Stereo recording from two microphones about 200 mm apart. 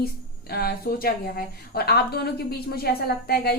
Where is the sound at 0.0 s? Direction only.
50° left (ahead or behind).